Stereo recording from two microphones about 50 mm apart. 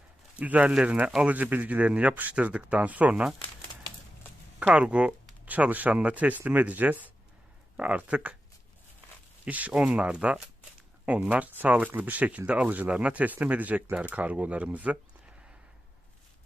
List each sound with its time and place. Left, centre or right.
0.3 s a man's voice: right
0.7 s speech: centre
1.2 s a man's voice: right
4.6 s a man's voice: right
9.4 s a man's voice: right